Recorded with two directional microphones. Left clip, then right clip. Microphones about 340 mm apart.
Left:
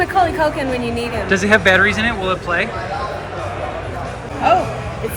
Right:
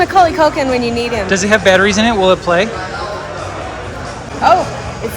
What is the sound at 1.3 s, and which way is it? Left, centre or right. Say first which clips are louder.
Speech: right 2 dB; centre.